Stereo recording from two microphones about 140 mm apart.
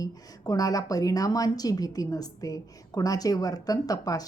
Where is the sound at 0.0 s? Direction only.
25° left (ahead or behind).